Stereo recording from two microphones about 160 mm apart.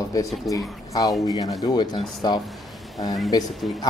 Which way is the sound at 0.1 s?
20° left (ahead or behind).